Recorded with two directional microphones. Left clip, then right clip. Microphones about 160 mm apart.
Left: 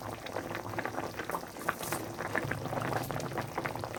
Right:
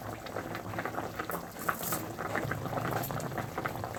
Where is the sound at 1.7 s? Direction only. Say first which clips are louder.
Right 1 dB; 5° left (ahead or behind).